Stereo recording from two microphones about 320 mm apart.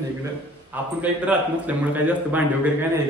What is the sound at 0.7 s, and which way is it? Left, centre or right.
A man's voice, centre.